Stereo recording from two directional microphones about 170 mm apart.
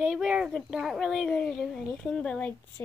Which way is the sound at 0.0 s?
5° right (ahead or behind).